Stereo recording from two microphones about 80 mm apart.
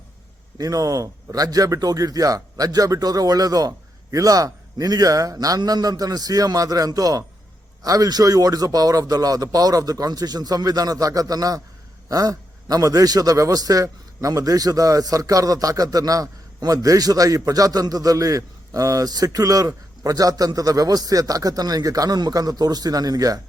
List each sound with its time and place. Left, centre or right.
0.6 s a man's voice: right